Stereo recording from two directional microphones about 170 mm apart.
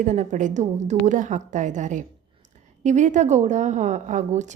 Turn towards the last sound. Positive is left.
turn(degrees=-45)  # may be behind; listen again after turning